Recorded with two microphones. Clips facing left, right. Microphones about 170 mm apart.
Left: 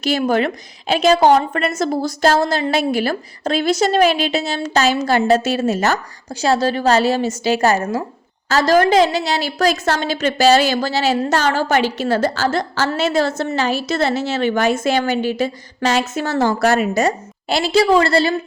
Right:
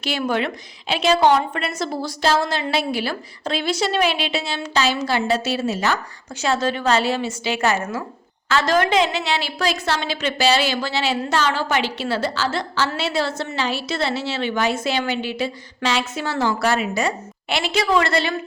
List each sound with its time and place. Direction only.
0.0 s a woman's voice: 40° left (ahead or behind)
6.4 s a woman's voice: 35° left (ahead or behind)